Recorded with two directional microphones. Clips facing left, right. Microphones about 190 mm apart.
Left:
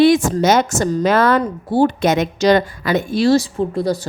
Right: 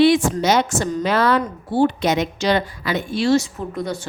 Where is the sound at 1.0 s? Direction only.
50° left (ahead or behind).